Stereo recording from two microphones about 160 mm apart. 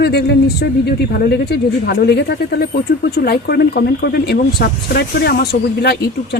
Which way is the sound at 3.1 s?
75° left (ahead or behind).